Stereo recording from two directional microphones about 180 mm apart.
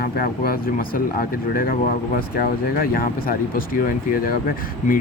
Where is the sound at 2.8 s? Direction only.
55° left (ahead or behind).